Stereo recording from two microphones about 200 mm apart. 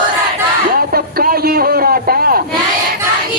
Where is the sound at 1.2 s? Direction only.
50° right (ahead or behind).